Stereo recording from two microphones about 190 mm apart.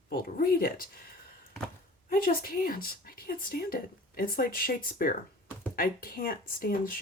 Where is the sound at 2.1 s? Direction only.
50° left (ahead or behind).